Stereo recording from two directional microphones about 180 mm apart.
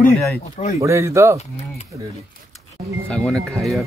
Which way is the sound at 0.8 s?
15° right (ahead or behind).